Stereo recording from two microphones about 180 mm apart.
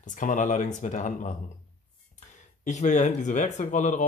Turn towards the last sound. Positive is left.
turn(degrees=40)  # may be behind; listen again after turning